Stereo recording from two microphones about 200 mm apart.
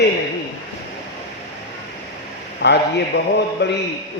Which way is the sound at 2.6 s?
65° left (ahead or behind).